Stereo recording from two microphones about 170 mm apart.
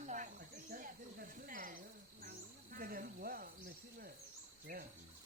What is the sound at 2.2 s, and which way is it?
Cricket, 60° right (ahead or behind).